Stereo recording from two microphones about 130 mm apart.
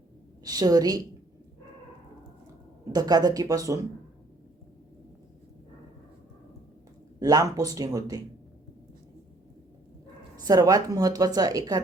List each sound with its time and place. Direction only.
0.4 s a woman's voice: 30° right (ahead or behind)
2.9 s a woman's voice: 30° right (ahead or behind)
7.2 s a woman's voice: 25° right (ahead or behind)
10.4 s a woman's voice: 30° right (ahead or behind)